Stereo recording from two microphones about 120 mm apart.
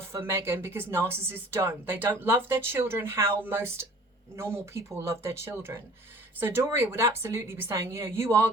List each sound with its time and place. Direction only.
0.1 s speech: 20° right (ahead or behind)